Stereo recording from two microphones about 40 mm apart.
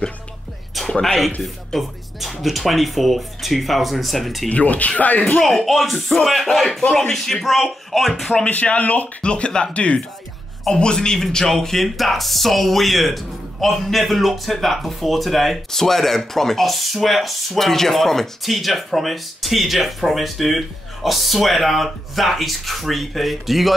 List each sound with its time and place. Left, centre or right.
0.8 s music: centre
1.8 s speech: centre
4.5 s speech: left
5.4 s speech: centre
8.5 s speech: left
9.2 s speech: left
11.3 s speech: centre